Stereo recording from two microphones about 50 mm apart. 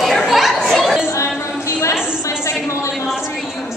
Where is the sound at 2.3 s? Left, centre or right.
Left.